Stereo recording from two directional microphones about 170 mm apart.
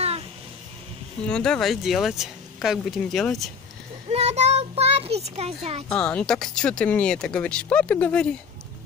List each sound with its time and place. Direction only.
1.2 s speech: 5° left (ahead or behind)
4.1 s child singing: 40° right (ahead or behind)
5.9 s speech: 5° left (ahead or behind)